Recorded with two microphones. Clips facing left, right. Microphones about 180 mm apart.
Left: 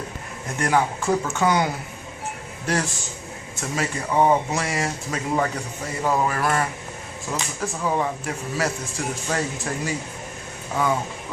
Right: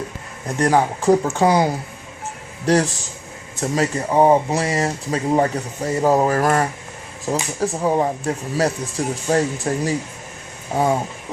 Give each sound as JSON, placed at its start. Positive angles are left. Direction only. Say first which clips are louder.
{"t": 0.4, "sound": "speech", "louder": "right 5 dB", "side_deg": -35}